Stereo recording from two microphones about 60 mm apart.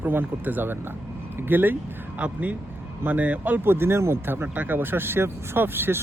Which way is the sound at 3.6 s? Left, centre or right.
Right.